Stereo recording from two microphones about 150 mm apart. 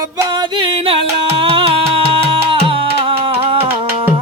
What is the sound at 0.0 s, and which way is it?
Music, 25° right (ahead or behind).